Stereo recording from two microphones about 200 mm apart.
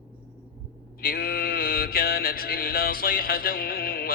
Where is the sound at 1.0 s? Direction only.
45° left (ahead or behind).